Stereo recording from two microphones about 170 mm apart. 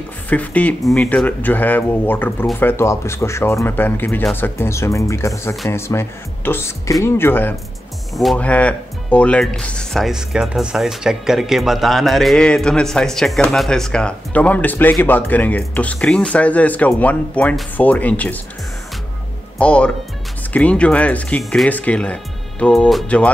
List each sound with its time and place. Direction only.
0.3 s speech: 10° left (ahead or behind)
8.1 s speech: centre (ahead or behind)
19.6 s speech: 5° left (ahead or behind)